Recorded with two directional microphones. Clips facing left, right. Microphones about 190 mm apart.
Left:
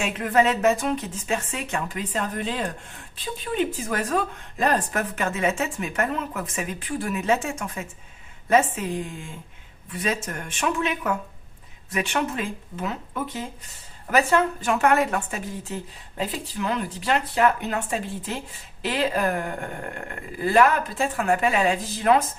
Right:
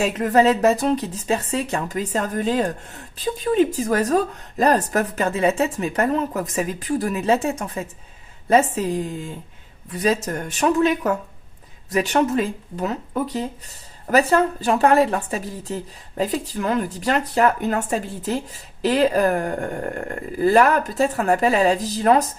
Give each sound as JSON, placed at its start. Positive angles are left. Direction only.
{"t": 0.0, "sound": "speech", "side_deg": -40}